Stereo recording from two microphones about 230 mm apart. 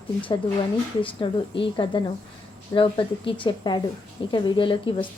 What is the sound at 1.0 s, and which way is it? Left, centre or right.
A woman's voice, left.